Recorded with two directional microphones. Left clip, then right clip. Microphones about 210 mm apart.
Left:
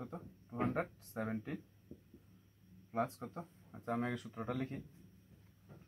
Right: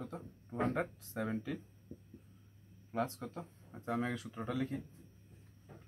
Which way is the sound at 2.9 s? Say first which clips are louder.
Right 1 dB; 15° left (ahead or behind).